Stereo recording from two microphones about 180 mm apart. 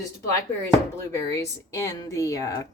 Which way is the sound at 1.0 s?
15° left (ahead or behind).